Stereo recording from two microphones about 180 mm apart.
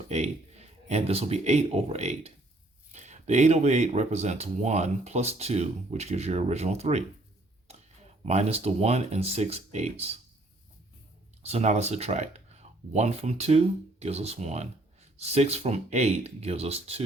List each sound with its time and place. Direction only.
0.1 s speech: 35° right (ahead or behind)
11.4 s speech: 40° right (ahead or behind)